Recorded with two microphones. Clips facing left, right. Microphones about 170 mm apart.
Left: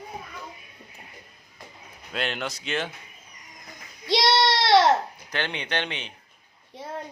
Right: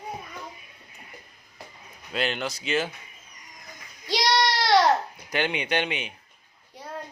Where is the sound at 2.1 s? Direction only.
Centre (ahead or behind).